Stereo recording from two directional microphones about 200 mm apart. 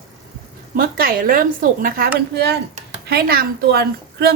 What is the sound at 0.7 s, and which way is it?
Speech, 45° right (ahead or behind).